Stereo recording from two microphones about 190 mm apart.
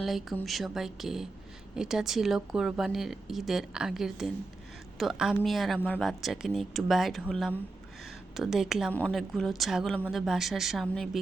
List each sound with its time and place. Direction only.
0.0 s a woman's voice: centre (ahead or behind)